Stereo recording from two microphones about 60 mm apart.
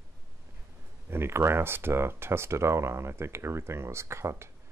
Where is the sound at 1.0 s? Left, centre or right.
Right.